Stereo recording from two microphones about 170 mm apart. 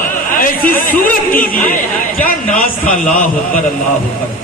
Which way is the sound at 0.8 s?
55° left (ahead or behind).